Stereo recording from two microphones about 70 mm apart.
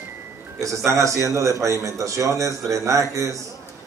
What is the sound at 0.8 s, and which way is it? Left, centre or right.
A man's voice, right.